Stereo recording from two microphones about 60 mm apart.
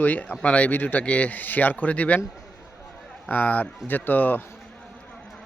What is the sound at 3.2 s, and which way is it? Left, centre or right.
A man's voice, left.